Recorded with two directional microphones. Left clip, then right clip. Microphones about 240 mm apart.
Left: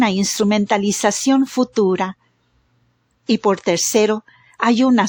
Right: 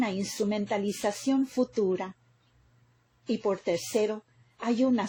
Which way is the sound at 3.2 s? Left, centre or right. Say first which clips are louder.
Left 12 dB; left.